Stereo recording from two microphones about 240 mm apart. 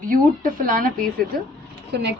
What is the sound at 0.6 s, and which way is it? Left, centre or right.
A woman's voice, right.